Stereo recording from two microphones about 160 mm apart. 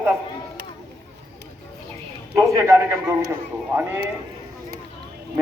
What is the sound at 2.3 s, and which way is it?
A man's voice, 20° right (ahead or behind).